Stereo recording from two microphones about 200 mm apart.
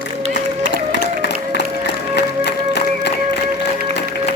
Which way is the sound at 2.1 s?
55° left (ahead or behind).